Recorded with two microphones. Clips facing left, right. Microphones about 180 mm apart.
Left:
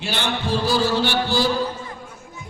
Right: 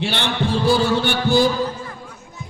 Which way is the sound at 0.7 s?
55° right (ahead or behind).